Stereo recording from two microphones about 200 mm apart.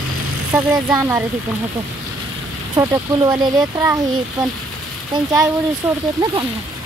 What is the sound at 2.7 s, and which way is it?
Speech, 20° right (ahead or behind).